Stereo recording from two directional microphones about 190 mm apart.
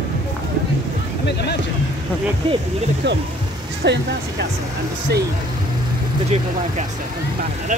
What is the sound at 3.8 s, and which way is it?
Speech, 65° right (ahead or behind).